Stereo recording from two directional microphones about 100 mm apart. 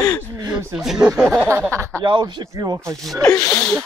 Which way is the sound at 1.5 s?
30° right (ahead or behind).